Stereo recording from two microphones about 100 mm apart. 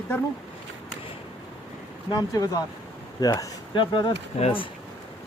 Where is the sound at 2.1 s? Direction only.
40° left (ahead or behind).